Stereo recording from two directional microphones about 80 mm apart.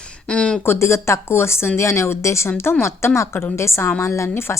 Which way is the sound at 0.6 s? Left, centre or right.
Left.